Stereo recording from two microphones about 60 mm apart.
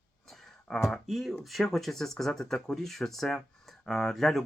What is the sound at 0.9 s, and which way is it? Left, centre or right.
Speech, centre.